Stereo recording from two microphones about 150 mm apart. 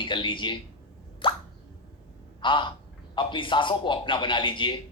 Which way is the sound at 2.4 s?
35° left (ahead or behind).